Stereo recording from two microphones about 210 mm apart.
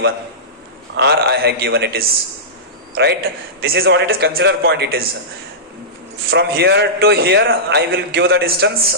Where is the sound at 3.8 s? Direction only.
55° right (ahead or behind).